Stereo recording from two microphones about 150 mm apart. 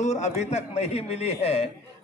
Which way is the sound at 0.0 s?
50° left (ahead or behind).